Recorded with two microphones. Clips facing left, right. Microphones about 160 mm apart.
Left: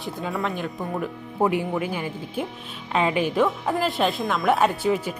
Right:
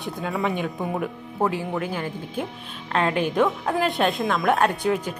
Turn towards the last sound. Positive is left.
turn(degrees=0)  # may be behind; listen again after turning